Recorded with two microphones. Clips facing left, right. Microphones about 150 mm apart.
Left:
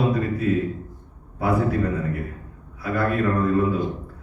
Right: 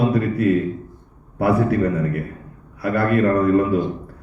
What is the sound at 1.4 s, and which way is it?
A man's voice, 65° right (ahead or behind).